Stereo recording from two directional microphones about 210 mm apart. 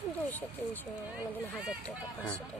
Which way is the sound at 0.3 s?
10° left (ahead or behind).